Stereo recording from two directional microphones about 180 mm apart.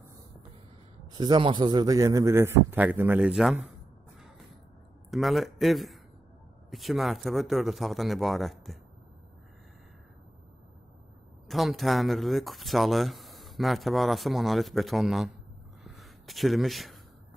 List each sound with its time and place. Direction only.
1.1 s a man's voice: 25° right (ahead or behind); by 3.5 s 5° right (ahead or behind)
5.1 s speech: centre (ahead or behind)
11.4 s speech: centre (ahead or behind)
15.8 s a sound: centre (ahead or behind)